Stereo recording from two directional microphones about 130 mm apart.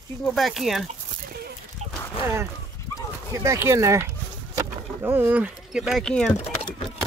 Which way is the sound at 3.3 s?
25° right (ahead or behind).